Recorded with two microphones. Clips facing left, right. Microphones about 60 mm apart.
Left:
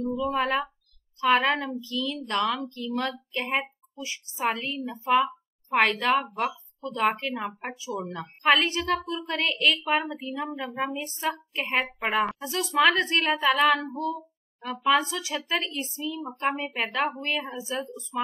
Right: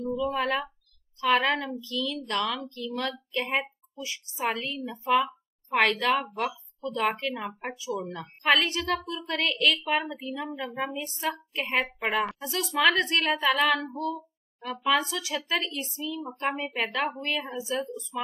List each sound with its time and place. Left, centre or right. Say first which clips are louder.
0.3 s a child's voice: left 2 dB; centre
11.1 s a child's voice: left 2 dB; left
13.9 s a child's voice: left 1 dB; centre; by 17.8 s left